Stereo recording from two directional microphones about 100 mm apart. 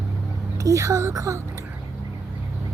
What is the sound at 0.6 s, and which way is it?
A woman's voice, 30° right (ahead or behind).